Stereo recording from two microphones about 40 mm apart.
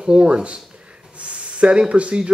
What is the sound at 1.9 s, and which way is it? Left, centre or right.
Speech, right.